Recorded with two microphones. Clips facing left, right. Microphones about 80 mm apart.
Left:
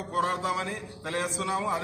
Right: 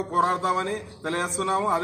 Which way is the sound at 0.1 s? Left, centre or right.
Right.